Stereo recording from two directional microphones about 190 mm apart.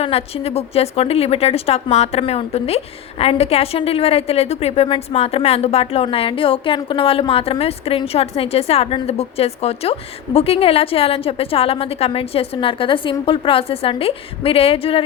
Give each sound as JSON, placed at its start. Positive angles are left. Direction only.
{"t": 0.0, "sound": "a woman's voice", "side_deg": 30}